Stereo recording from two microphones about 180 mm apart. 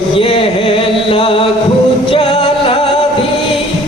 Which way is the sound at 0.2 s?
30° left (ahead or behind).